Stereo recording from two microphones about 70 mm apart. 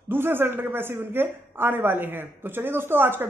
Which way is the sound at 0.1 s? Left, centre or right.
Right.